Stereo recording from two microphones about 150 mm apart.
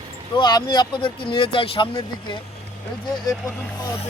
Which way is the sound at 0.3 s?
30° left (ahead or behind).